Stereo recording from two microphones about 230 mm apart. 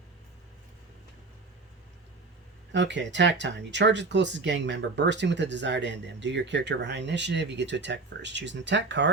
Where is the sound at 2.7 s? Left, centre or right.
Right.